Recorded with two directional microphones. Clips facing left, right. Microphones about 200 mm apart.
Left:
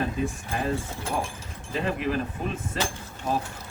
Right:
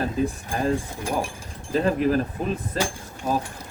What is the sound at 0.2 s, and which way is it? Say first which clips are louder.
Speech: right 4 dB; 35° right (ahead or behind).